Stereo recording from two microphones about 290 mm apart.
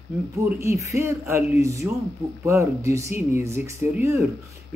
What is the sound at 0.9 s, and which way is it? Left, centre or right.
Speech, centre.